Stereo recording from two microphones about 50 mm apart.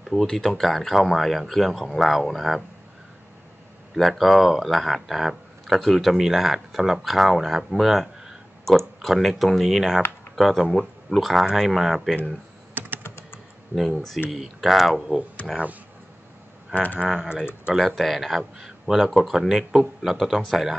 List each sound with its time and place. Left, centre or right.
0.0 s speech: centre
3.9 s speech: centre
13.0 s typing: left
14.3 s speech: centre
16.7 s speech: left
17.7 s speech: centre